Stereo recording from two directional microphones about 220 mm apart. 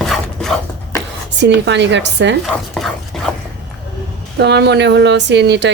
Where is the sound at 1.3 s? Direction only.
50° right (ahead or behind).